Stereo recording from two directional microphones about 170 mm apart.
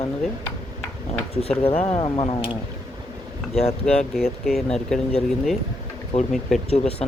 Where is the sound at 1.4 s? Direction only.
35° left (ahead or behind).